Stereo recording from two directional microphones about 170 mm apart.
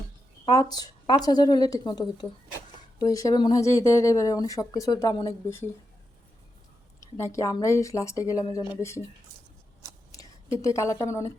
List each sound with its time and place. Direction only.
0.5 s speech: 20° left (ahead or behind)
7.0 s speech: 15° left (ahead or behind)
10.1 s a woman's voice: 20° left (ahead or behind)